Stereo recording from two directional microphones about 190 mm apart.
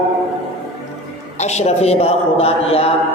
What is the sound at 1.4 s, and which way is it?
A man's voice, 35° left (ahead or behind).